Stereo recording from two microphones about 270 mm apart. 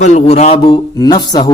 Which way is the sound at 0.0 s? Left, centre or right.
Left.